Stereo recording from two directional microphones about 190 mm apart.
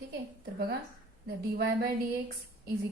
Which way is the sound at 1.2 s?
55° right (ahead or behind).